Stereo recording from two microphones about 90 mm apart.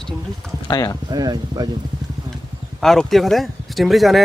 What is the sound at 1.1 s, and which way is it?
Speech, 45° right (ahead or behind).